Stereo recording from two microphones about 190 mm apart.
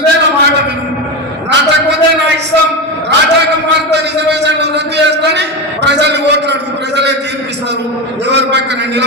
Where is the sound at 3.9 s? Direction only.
65° right (ahead or behind).